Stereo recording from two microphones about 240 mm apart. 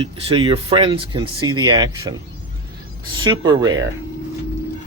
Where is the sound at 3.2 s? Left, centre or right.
Centre.